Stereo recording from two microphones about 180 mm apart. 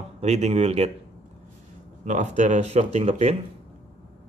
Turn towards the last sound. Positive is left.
turn(degrees=-40)  # may be behind; listen again after turning